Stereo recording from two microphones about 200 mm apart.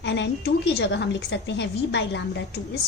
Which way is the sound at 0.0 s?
60° left (ahead or behind).